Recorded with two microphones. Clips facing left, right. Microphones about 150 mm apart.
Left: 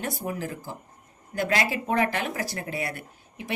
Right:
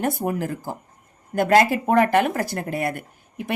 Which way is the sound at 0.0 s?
55° right (ahead or behind).